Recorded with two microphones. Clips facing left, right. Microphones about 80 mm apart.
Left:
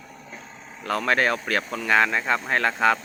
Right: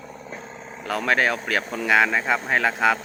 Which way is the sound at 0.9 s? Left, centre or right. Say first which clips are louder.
Even; centre.